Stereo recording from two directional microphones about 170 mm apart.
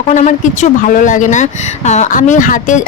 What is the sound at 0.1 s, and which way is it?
Speech, 45° left (ahead or behind).